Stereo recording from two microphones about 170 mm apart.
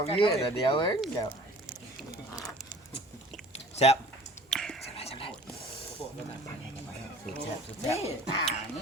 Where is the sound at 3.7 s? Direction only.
40° left (ahead or behind).